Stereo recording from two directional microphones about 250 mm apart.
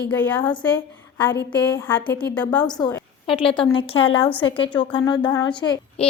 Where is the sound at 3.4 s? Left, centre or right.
Left.